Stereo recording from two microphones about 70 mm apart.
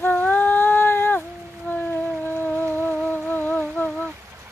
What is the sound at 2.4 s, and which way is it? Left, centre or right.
Music, left.